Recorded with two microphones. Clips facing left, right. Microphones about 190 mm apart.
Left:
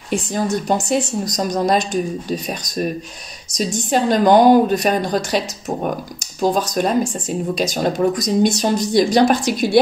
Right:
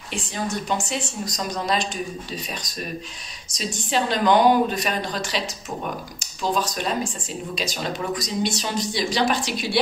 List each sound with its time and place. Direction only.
0.1 s speech: 40° left (ahead or behind)
3.5 s speech: 45° left (ahead or behind)